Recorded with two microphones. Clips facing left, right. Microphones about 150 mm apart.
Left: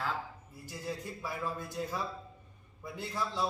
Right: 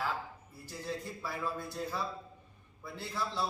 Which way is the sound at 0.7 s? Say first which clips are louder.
Even; 10° left (ahead or behind).